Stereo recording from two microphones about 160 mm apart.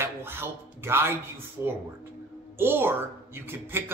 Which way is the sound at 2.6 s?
15° right (ahead or behind).